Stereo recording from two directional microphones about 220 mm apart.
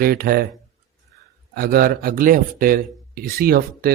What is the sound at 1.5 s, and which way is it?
Speech, 45° right (ahead or behind).